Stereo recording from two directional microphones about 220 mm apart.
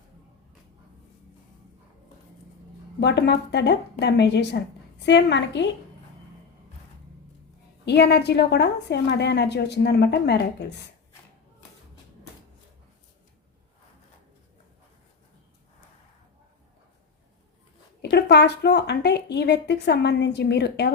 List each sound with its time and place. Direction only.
3.0 s a woman's voice: 50° left (ahead or behind)
7.9 s a woman's voice: 50° left (ahead or behind)
18.0 s a woman's voice: 50° left (ahead or behind)